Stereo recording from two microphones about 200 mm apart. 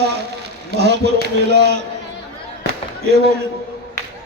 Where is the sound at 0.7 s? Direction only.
55° right (ahead or behind).